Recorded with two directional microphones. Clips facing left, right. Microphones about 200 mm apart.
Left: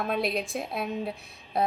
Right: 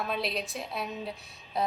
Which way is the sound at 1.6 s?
55° left (ahead or behind).